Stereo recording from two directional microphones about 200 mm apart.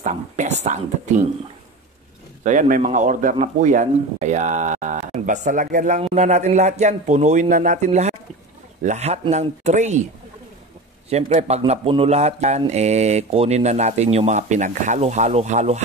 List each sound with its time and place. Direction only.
0.0 s speech: 35° right (ahead or behind)
2.4 s speech: 40° right (ahead or behind)
11.1 s speech: 35° right (ahead or behind)